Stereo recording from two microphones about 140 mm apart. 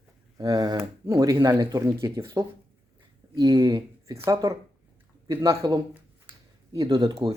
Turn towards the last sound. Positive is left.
turn(degrees=-25)  # may be behind; listen again after turning